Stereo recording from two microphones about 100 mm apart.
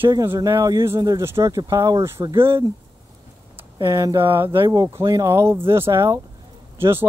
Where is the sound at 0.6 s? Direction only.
30° right (ahead or behind).